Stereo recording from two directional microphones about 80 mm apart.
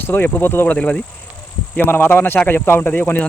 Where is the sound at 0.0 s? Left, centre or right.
Left.